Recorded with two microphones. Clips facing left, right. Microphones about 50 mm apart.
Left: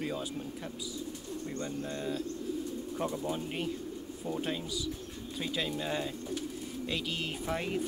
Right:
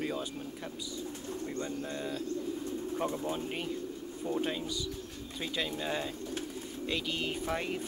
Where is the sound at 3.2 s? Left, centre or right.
Centre.